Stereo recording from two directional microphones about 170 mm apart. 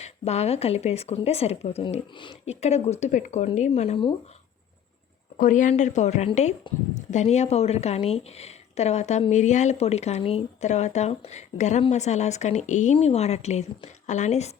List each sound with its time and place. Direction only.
0.0 s speech: 40° left (ahead or behind)
5.4 s a woman's voice: 50° left (ahead or behind)